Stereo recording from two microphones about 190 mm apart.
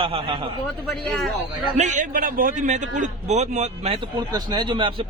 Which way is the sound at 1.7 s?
40° right (ahead or behind).